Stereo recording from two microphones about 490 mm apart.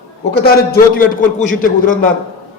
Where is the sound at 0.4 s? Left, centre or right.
Centre.